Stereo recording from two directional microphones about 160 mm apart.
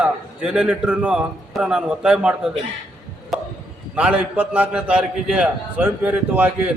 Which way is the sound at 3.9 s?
10° right (ahead or behind).